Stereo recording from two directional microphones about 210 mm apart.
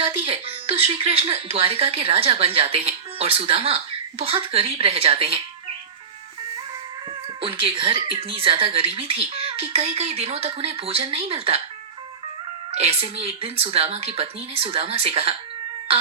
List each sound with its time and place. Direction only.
0.0 s speech: 25° right (ahead or behind)
7.4 s speech: 25° right (ahead or behind)
12.7 s speech: 30° right (ahead or behind)